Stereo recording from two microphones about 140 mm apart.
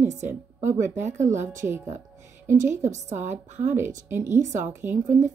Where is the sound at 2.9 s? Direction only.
55° right (ahead or behind).